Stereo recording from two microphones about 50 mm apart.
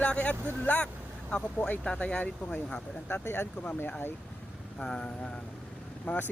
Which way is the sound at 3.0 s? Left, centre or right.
Left.